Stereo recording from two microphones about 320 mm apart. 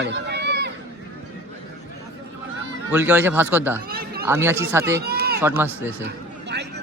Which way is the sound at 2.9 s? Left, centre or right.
Centre.